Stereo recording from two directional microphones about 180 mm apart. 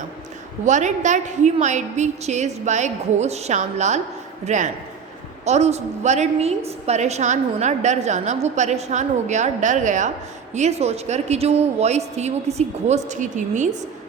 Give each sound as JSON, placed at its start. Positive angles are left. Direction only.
{"t": 0.6, "sound": "a woman's voice", "side_deg": -40}